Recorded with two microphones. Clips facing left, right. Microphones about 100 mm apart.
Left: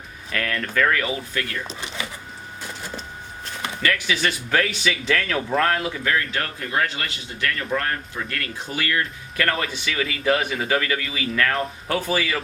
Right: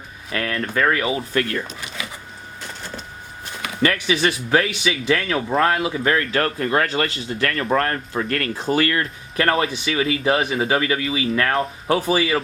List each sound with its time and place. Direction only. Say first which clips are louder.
0.3 s speech: right 2 dB; 25° right (ahead or behind)
1.6 s speech: left 1 dB; 30° left (ahead or behind)
3.8 s speech: right 4 dB; 25° right (ahead or behind); by 5.7 s 5° right (ahead or behind)
5.7 s speech: right 3 dB; 15° right (ahead or behind)
6.0 s speech: right 5 dB; 45° right (ahead or behind)
9.4 s speech: right 5 dB; 30° right (ahead or behind)